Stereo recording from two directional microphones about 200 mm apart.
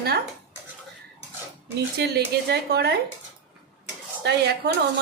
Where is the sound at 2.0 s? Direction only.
55° right (ahead or behind).